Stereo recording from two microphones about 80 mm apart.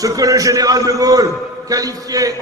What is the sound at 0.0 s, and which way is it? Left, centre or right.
Speech, right.